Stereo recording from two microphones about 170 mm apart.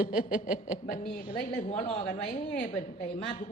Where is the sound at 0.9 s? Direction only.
55° left (ahead or behind).